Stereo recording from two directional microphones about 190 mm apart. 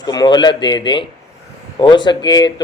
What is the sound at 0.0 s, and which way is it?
Speech, 20° left (ahead or behind).